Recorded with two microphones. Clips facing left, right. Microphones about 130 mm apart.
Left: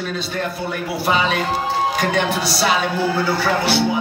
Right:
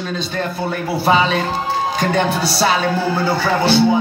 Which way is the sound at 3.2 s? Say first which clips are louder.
Right 3 dB; 25° right (ahead or behind).